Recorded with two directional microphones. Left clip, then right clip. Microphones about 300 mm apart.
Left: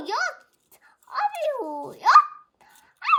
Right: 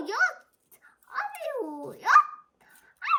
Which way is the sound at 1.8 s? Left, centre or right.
Centre.